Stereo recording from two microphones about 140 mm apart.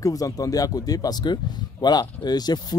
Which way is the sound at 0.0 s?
25° left (ahead or behind).